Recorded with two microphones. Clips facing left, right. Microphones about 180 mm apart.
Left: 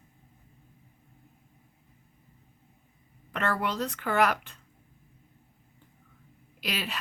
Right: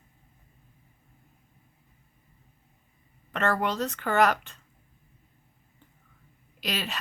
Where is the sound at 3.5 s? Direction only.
40° right (ahead or behind).